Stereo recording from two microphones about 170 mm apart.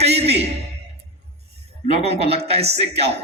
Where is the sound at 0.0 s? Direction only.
40° right (ahead or behind).